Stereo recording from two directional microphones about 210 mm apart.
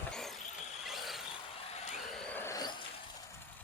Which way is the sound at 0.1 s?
Centre (ahead or behind).